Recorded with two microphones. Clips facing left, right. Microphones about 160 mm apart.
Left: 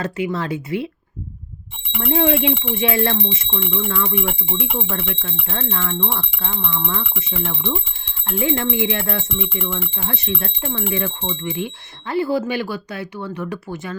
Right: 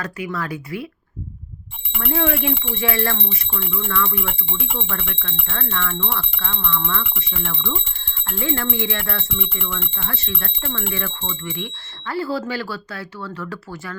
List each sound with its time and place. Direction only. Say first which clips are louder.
0.0 s speech: left 4 dB; 25° left (ahead or behind)
2.0 s speech: left 4 dB; 20° left (ahead or behind)
4.9 s speech: left 4 dB; 25° left (ahead or behind)
6.4 s speech: left 1 dB; 15° left (ahead or behind)